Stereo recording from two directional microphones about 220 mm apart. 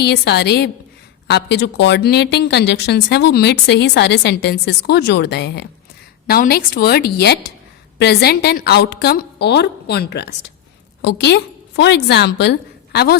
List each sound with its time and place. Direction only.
0.0 s a woman's voice: 50° left (ahead or behind)